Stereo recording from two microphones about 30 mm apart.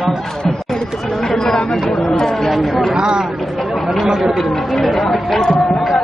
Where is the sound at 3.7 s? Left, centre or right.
Centre.